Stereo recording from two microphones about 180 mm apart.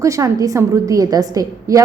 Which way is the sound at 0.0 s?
20° right (ahead or behind).